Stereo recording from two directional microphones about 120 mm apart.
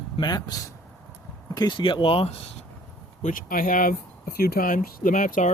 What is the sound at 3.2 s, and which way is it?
Speech, 90° left.